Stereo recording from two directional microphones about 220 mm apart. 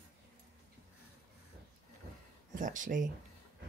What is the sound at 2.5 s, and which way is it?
Speech, 35° right (ahead or behind).